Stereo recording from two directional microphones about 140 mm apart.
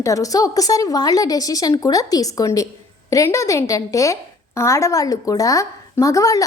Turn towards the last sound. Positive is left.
turn(degrees=25)  # may be behind; listen again after turning